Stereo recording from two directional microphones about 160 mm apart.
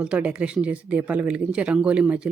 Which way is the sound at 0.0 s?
5° right (ahead or behind).